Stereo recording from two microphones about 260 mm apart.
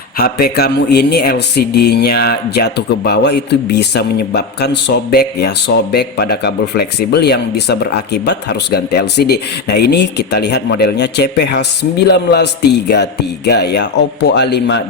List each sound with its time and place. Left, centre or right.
0.4 s speech: left